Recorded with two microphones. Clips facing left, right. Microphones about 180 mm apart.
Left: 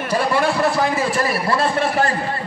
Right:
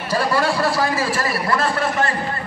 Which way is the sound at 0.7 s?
20° left (ahead or behind).